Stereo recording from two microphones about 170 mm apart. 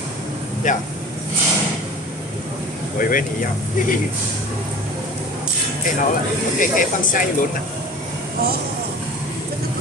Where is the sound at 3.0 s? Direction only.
55° left (ahead or behind).